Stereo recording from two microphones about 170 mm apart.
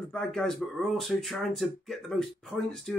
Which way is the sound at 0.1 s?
5° left (ahead or behind).